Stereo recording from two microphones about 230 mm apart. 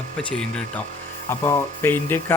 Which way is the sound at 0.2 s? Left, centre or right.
Centre.